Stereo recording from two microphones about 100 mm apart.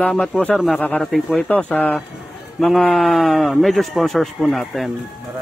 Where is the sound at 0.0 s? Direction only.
10° left (ahead or behind).